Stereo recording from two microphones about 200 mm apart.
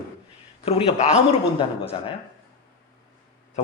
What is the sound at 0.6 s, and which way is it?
Speech, 30° left (ahead or behind).